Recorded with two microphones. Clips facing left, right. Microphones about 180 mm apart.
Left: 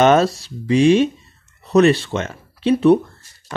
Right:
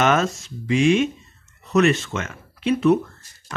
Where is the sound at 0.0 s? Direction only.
35° left (ahead or behind).